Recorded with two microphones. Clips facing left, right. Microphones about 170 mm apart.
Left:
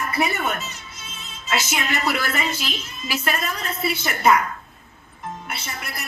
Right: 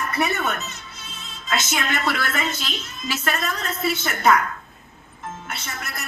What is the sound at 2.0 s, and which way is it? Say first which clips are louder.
A woman's voice: left 1 dB; 10° left (ahead or behind).